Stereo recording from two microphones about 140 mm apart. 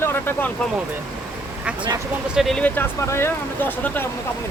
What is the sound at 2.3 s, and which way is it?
Speech, centre (ahead or behind).